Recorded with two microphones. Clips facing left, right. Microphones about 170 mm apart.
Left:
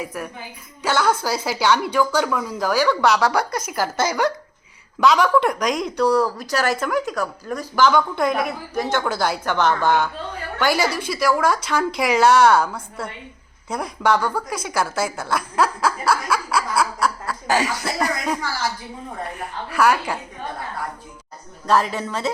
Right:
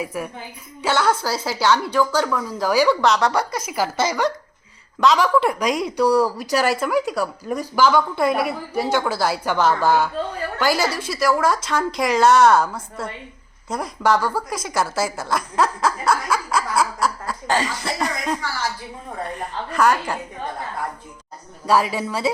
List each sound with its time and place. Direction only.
0.0 s a woman's voice: 10° right (ahead or behind)
3.0 s a woman's voice: 5° left (ahead or behind)
19.4 s a woman's voice: 5° left (ahead or behind)
21.7 s a woman's voice: 10° right (ahead or behind)